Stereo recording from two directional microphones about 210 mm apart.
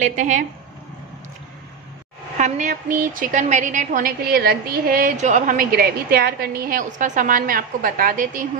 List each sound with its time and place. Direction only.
0.0 s a woman's voice: 35° right (ahead or behind)
2.3 s a woman's voice: 35° right (ahead or behind)